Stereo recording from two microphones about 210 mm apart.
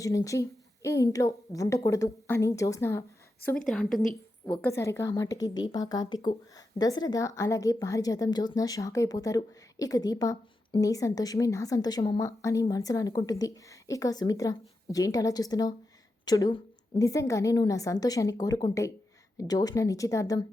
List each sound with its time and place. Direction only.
0.0 s a woman's voice: 15° left (ahead or behind)
3.4 s a woman's voice: 5° left (ahead or behind)
4.6 s a woman's voice: 15° left (ahead or behind)